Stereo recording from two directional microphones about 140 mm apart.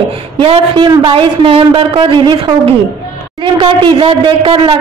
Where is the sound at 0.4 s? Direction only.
40° right (ahead or behind).